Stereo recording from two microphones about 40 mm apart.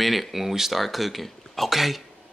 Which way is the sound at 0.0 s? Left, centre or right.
Centre.